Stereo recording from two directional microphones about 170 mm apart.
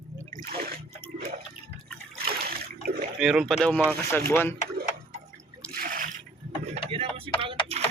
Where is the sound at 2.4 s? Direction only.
65° right (ahead or behind).